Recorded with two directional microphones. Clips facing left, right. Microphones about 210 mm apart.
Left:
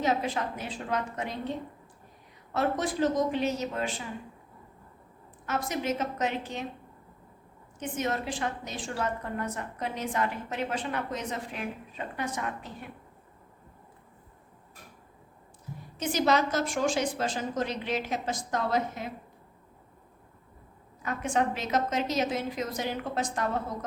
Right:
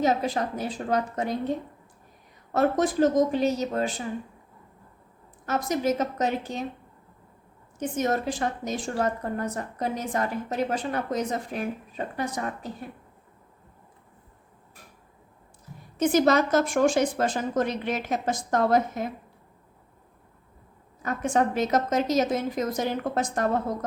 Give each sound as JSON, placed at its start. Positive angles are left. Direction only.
{"t": 0.0, "sound": "a woman's voice", "side_deg": -40}
{"t": 2.5, "sound": "a woman's voice", "side_deg": -45}
{"t": 5.5, "sound": "a woman's voice", "side_deg": -40}
{"t": 7.8, "sound": "a woman's voice", "side_deg": -40}
{"t": 16.0, "sound": "a woman's voice", "side_deg": -50}
{"t": 21.0, "sound": "a woman's voice", "side_deg": -45}